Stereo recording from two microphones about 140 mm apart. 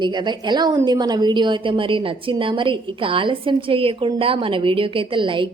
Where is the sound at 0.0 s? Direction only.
35° right (ahead or behind).